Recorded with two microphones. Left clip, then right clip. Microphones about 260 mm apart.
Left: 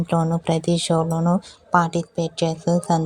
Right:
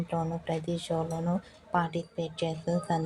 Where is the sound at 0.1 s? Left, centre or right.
Left.